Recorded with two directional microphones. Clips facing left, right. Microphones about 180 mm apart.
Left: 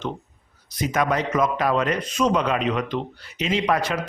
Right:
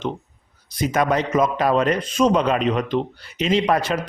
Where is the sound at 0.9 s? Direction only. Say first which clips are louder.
Right 3 dB; 25° right (ahead or behind).